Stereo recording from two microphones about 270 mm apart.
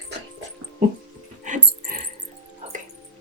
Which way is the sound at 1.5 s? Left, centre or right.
Right.